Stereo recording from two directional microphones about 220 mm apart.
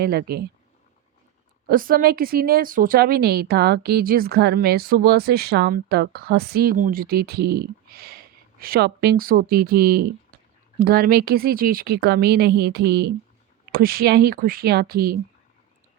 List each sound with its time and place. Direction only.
0.0 s a woman's voice: 45° right (ahead or behind)
1.6 s a woman's voice: 40° right (ahead or behind)